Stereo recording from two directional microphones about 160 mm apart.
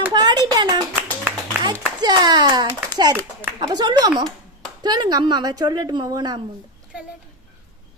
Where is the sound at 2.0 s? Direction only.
25° right (ahead or behind).